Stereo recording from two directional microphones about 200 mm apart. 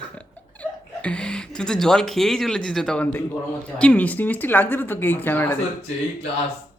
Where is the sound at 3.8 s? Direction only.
5° left (ahead or behind).